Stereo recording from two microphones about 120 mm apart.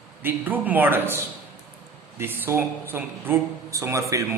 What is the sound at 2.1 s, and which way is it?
A man's voice, 15° right (ahead or behind).